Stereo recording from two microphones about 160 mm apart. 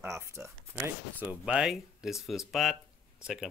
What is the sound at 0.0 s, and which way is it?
Speech, 15° right (ahead or behind).